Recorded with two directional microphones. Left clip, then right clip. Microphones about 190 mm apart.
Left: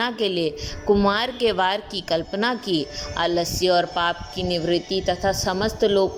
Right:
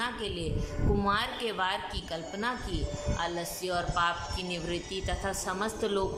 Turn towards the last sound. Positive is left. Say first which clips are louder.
# left 11 dB
turn(degrees=30)  # may be behind; listen again after turning